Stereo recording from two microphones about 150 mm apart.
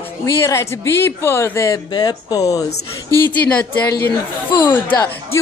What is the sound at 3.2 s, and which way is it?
Speech, 10° left (ahead or behind).